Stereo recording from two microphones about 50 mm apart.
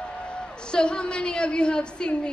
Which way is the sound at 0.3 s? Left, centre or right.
Centre.